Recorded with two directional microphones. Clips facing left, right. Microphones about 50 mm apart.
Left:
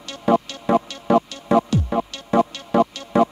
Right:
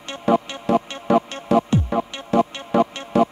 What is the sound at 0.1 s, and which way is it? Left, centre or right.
Music, right.